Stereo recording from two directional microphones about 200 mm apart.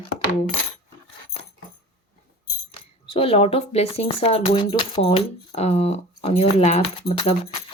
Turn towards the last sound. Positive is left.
turn(degrees=30)  # may be behind; listen again after turning